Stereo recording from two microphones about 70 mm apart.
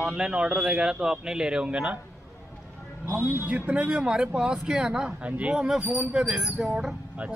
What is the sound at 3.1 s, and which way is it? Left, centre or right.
A man's voice, right.